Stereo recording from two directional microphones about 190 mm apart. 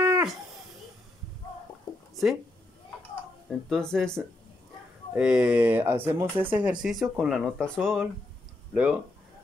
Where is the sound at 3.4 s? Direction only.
5° left (ahead or behind).